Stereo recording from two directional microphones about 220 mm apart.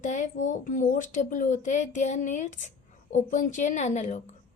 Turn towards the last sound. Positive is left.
turn(degrees=30)  # may be behind; listen again after turning